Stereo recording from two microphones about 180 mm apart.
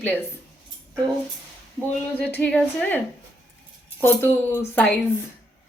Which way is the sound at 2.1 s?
10° left (ahead or behind).